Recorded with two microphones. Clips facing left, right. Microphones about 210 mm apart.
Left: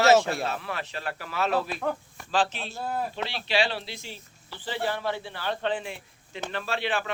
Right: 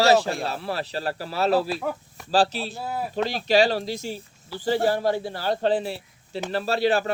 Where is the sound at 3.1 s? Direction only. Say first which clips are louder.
Right 8 dB; 40° right (ahead or behind).